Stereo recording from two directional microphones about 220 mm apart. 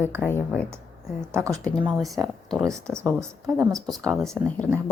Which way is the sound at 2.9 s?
10° right (ahead or behind).